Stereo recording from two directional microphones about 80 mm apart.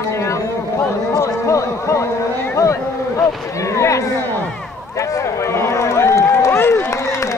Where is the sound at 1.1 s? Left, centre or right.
Left.